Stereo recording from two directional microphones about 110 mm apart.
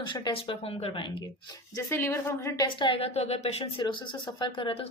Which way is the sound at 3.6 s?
45° left (ahead or behind).